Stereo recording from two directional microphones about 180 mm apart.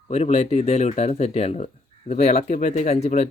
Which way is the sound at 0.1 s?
35° left (ahead or behind).